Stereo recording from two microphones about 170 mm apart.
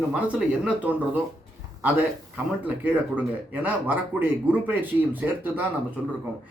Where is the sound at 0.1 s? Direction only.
5° right (ahead or behind).